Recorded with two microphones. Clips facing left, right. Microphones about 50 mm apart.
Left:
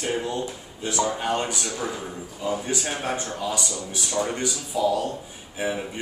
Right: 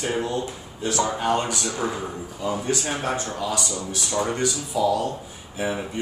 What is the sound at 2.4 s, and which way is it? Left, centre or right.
Speech, centre.